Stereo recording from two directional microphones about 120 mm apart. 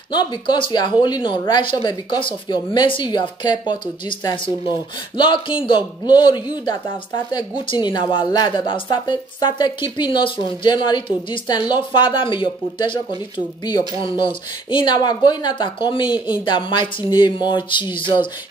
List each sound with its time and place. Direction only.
0.1 s speech: 40° left (ahead or behind)